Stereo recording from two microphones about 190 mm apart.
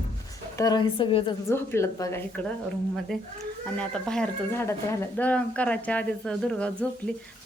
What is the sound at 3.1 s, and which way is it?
Speech, 5° left (ahead or behind).